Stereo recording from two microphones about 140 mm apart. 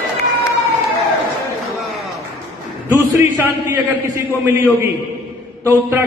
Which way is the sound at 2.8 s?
15° right (ahead or behind).